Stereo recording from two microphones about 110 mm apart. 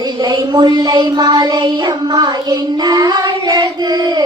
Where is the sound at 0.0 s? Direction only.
40° right (ahead or behind).